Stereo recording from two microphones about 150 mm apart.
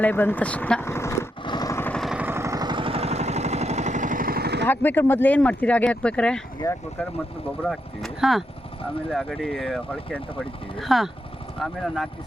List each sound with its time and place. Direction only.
0.0 s speech: 15° left (ahead or behind)
1.5 s vehicle: 25° left (ahead or behind)
1.9 s vehicle: centre (ahead or behind)
2.1 s vehicle: 15° right (ahead or behind); by 4.6 s 90° right
4.6 s speech: 10° left (ahead or behind)
7.6 s speech: centre (ahead or behind)